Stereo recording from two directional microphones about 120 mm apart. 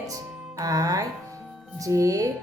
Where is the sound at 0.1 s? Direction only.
30° right (ahead or behind).